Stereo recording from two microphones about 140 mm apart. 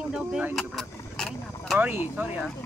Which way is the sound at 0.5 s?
5° left (ahead or behind).